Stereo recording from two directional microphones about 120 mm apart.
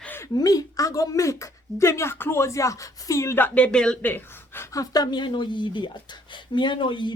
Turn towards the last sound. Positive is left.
turn(degrees=40)  # may be behind; listen again after turning